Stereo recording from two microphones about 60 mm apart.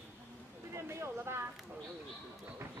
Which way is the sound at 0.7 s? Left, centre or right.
Right.